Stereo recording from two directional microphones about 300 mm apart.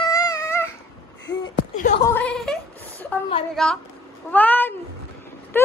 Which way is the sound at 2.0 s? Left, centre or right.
Centre.